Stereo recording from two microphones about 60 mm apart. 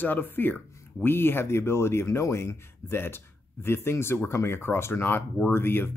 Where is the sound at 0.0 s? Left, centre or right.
Left.